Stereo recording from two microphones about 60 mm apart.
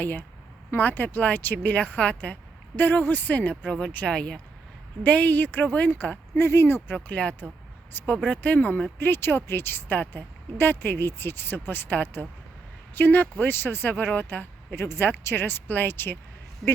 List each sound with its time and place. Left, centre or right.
0.0 s speech: left
2.7 s speech: left
6.3 s speech: left
6.9 s speech: left
7.9 s speech: left
14.8 s speech: left